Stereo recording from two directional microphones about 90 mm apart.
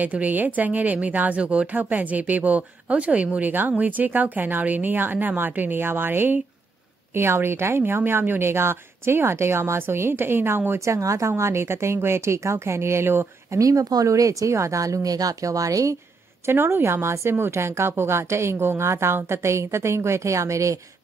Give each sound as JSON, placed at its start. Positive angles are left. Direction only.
{"t": 0.0, "sound": "a woman's voice", "side_deg": -15}
{"t": 13.6, "sound": "speech", "side_deg": -40}
{"t": 16.4, "sound": "a woman's voice", "side_deg": -25}